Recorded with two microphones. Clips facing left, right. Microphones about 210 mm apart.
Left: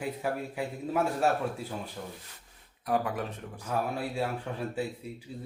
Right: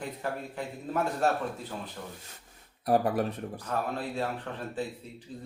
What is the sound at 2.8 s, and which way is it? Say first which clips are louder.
Speech: right 4 dB; 35° right (ahead or behind).